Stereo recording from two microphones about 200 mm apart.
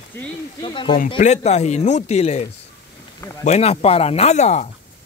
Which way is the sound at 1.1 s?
35° left (ahead or behind).